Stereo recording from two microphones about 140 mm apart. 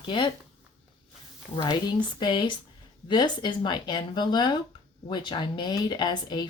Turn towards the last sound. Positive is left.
turn(degrees=30)  # may be behind; listen again after turning